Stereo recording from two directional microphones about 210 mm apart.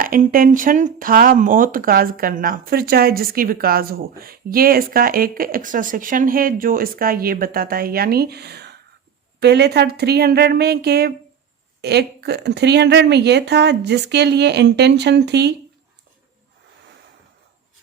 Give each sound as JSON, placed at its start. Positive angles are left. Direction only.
{"t": 0.0, "sound": "speech", "side_deg": -40}